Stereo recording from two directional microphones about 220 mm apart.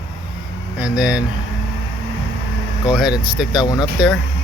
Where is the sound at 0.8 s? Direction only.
5° right (ahead or behind).